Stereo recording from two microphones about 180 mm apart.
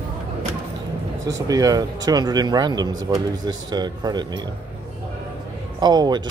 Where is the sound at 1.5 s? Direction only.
20° right (ahead or behind).